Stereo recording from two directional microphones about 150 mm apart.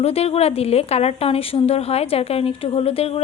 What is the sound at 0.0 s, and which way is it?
A woman's voice, 40° left (ahead or behind).